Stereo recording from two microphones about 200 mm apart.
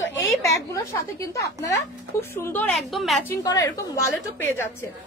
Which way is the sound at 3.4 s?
15° left (ahead or behind).